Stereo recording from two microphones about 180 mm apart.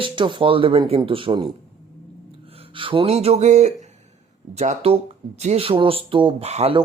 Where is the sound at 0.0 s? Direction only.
25° right (ahead or behind).